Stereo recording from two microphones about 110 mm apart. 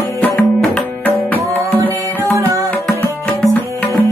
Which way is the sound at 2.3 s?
25° right (ahead or behind).